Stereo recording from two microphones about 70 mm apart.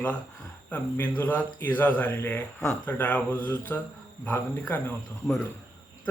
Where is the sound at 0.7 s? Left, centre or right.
Left.